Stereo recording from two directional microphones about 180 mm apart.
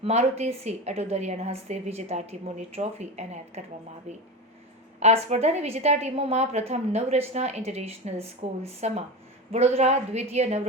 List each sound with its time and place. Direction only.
0.0 s a woman's voice: 35° right (ahead or behind)
4.9 s a woman's voice: 40° right (ahead or behind)